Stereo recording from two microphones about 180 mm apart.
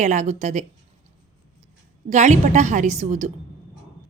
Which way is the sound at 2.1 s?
40° right (ahead or behind).